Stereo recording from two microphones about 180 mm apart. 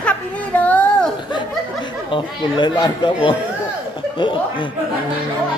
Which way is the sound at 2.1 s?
25° left (ahead or behind).